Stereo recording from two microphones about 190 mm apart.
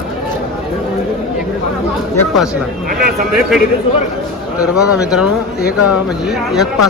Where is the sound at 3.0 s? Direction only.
50° right (ahead or behind).